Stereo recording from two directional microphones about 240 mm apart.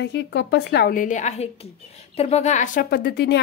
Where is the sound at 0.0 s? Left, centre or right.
Left.